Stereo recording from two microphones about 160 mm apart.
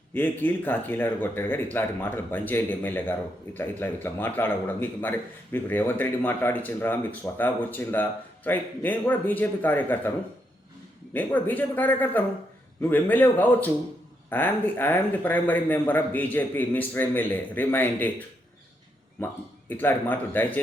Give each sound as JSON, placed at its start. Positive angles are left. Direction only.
{"t": 0.1, "sound": "speech", "side_deg": 10}
{"t": 11.1, "sound": "speech", "side_deg": 10}
{"t": 19.2, "sound": "speech", "side_deg": 10}